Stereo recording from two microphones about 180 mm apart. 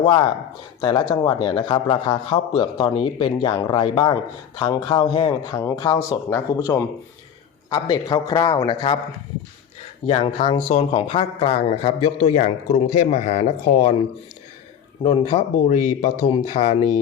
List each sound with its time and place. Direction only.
0.0 s speech: 25° left (ahead or behind)
7.7 s speech: 20° left (ahead or behind)
10.1 s speech: 30° left (ahead or behind)
15.0 s speech: 30° left (ahead or behind)